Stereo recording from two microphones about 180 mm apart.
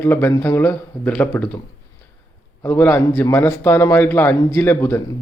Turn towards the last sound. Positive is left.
turn(degrees=15)  # may be behind; listen again after turning